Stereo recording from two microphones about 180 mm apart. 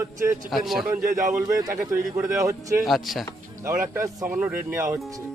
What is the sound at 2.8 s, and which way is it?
Speech, centre (ahead or behind).